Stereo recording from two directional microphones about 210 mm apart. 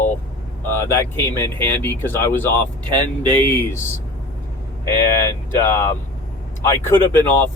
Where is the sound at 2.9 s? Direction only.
20° right (ahead or behind).